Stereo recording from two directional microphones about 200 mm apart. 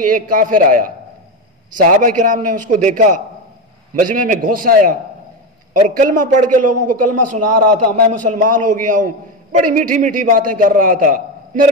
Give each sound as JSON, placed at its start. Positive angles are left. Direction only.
{"t": 0.0, "sound": "a man's voice", "side_deg": -40}